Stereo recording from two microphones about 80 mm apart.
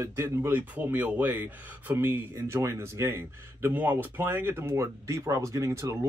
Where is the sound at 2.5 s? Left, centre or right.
Right.